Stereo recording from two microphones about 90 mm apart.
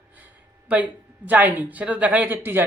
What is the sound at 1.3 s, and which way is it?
Speech, 20° right (ahead or behind).